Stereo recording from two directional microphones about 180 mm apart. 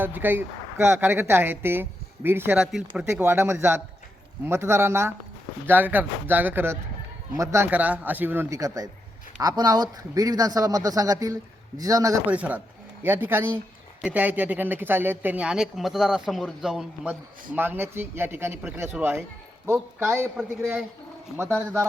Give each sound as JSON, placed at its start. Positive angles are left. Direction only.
{"t": 0.0, "sound": "speech", "side_deg": -10}
{"t": 12.2, "sound": "speech", "side_deg": -10}